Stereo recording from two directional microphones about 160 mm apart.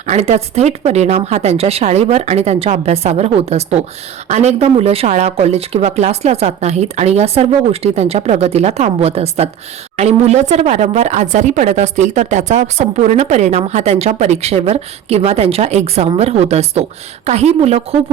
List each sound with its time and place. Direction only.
0.1 s speech: 40° right (ahead or behind)